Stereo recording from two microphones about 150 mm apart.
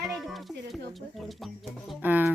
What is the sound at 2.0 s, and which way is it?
Speech, 10° right (ahead or behind).